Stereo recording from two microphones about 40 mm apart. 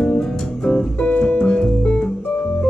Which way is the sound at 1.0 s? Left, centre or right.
Left.